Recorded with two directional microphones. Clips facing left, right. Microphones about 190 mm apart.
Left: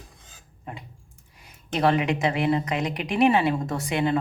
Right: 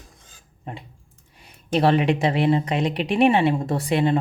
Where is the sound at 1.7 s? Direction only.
30° right (ahead or behind).